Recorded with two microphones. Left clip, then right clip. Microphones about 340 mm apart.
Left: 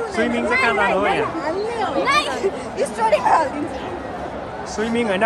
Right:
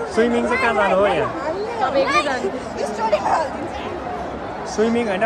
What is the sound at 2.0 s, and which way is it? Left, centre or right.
Speech, left.